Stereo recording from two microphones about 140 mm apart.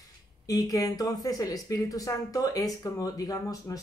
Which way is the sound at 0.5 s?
25° left (ahead or behind).